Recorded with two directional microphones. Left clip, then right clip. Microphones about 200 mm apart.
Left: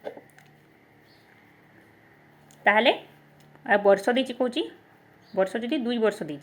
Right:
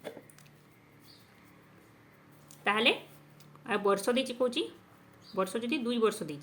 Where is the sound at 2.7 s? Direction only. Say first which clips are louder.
Left 7 dB; 15° left (ahead or behind).